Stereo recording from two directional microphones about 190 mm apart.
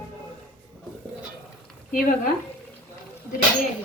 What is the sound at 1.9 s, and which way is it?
Speech, 45° left (ahead or behind).